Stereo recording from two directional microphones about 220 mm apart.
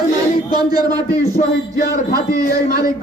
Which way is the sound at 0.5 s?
20° right (ahead or behind).